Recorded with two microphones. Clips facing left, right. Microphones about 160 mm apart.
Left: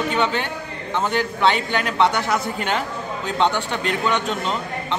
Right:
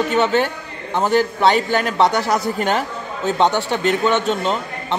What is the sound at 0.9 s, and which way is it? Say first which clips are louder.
A man's voice: right 5 dB; 35° right (ahead or behind).